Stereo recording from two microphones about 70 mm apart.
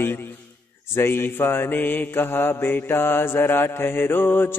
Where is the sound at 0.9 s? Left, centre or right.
Left.